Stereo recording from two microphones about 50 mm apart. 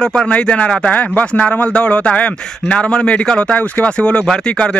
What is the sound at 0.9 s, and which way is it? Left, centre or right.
Speech, left.